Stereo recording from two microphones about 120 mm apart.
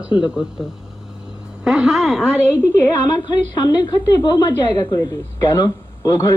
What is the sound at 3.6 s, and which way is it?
Speech, 30° left (ahead or behind).